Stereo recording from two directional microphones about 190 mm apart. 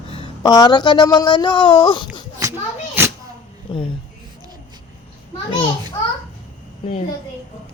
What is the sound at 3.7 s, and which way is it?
Speech, 25° left (ahead or behind).